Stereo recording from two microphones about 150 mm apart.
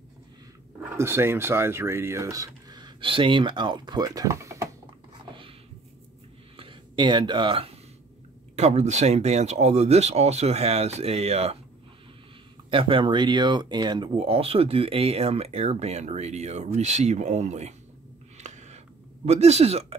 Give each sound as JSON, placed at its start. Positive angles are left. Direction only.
{"t": 0.9, "sound": "speech", "side_deg": -15}
{"t": 6.5, "sound": "speech", "side_deg": -35}
{"t": 8.5, "sound": "speech", "side_deg": -50}
{"t": 12.7, "sound": "speech", "side_deg": -35}
{"t": 18.4, "sound": "a sound", "side_deg": -50}
{"t": 19.2, "sound": "speech", "side_deg": -45}